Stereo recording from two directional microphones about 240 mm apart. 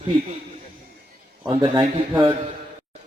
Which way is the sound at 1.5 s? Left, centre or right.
Centre.